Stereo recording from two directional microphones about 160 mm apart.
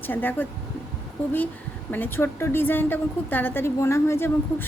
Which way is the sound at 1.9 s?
15° left (ahead or behind).